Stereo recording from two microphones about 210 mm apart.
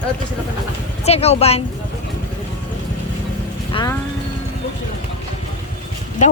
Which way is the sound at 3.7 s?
20° left (ahead or behind).